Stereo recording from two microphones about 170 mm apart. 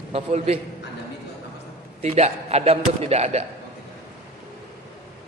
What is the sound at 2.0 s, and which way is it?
A man's voice, 40° right (ahead or behind).